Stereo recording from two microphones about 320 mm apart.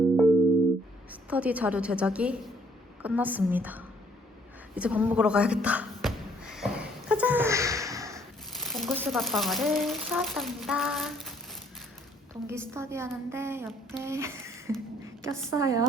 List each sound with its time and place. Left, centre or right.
1.3 s speech: centre
4.7 s a sound: centre
8.7 s speech: centre
12.3 s a woman's voice: centre